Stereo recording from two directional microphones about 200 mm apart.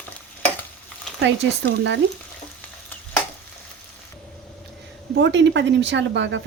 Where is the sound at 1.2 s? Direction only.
60° right (ahead or behind).